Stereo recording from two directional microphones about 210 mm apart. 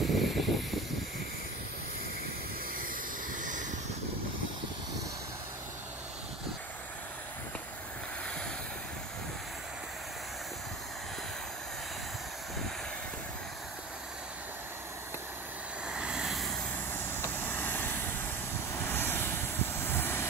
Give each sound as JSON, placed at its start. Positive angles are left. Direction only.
{"t": 0.0, "sound": "vehicle", "side_deg": 0}
{"t": 3.3, "sound": "a sound", "side_deg": -40}
{"t": 15.9, "sound": "vehicle", "side_deg": -5}
{"t": 16.9, "sound": "vehicle", "side_deg": 10}